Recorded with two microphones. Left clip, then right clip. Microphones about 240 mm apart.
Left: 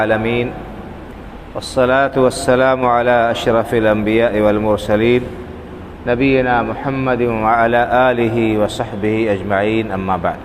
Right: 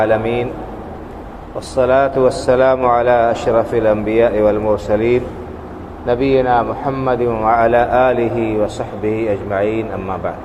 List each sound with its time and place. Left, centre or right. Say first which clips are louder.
0.0 s speech: right 1 dB; left
1.5 s speech: even; left